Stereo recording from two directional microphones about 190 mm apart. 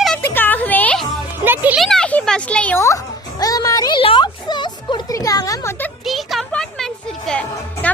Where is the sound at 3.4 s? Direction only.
20° left (ahead or behind).